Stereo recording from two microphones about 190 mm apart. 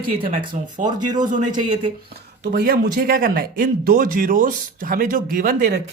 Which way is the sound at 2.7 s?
50° right (ahead or behind).